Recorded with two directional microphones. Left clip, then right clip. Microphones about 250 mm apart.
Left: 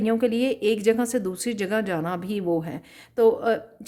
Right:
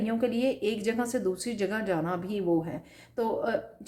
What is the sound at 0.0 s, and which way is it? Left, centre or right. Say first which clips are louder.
A woman's voice: left 5 dB; left.